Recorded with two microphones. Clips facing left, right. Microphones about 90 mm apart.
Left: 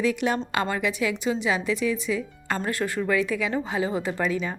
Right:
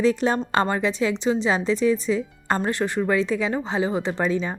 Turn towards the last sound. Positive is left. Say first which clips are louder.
# right 3 dB
turn(degrees=-25)  # may be behind; listen again after turning